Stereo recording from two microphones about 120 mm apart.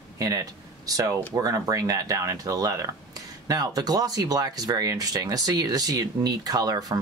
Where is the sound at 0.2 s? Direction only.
30° right (ahead or behind).